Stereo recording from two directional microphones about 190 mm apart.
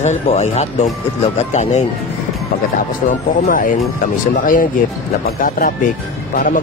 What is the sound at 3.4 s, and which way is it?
Speech, 45° left (ahead or behind).